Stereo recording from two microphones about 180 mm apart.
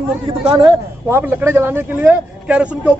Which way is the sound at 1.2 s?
10° right (ahead or behind).